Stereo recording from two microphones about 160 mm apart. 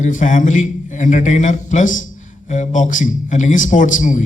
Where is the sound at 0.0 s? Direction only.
50° left (ahead or behind).